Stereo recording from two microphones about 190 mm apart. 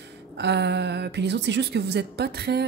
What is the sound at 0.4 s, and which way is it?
A woman's voice, 65° right (ahead or behind).